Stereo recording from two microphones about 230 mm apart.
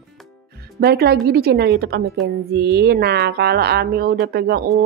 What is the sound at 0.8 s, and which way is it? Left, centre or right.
Speech, right.